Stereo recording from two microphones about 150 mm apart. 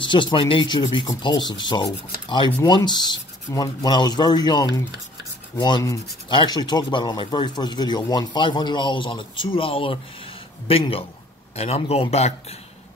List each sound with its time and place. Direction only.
0.0 s a man's voice: 30° left (ahead or behind)